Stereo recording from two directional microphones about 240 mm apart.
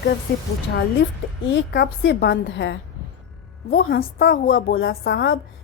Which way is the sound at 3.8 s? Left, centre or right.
Left.